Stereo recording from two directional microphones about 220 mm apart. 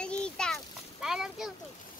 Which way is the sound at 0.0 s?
5° left (ahead or behind).